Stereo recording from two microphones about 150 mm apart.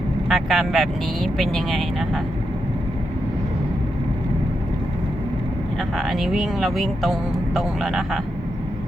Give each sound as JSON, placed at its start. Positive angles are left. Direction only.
{"t": 0.3, "sound": "speech", "side_deg": 0}
{"t": 6.0, "sound": "speech", "side_deg": 0}